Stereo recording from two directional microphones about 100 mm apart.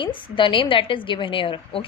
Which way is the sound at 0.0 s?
55° left (ahead or behind).